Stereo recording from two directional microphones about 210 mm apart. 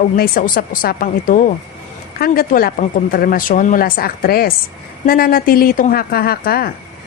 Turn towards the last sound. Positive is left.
turn(degrees=45)  # may be behind; listen again after turning